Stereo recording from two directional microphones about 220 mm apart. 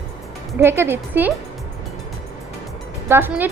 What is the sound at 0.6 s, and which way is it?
Speech, 10° right (ahead or behind).